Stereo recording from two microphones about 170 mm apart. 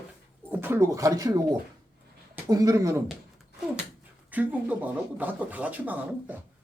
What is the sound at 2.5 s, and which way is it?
Speech, 20° right (ahead or behind).